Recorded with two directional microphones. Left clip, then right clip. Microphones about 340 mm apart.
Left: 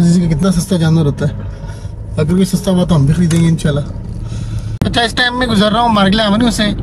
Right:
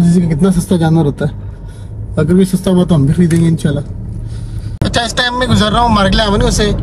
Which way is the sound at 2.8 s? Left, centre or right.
Centre.